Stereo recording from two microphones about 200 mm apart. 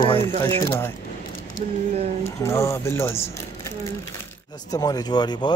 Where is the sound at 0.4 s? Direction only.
15° left (ahead or behind).